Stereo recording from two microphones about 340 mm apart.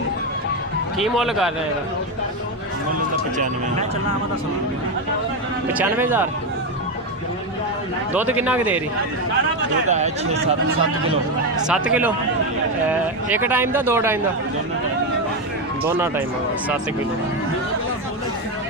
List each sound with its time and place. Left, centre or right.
0.9 s speech: centre
3.3 s speech: right
5.6 s speech: centre
8.1 s speech: centre
9.9 s speech: centre
11.7 s speech: centre
15.9 s speech: centre